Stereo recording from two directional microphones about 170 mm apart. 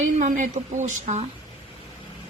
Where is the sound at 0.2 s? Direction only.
50° right (ahead or behind).